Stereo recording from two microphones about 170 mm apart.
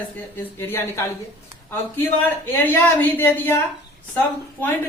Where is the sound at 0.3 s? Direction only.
15° left (ahead or behind).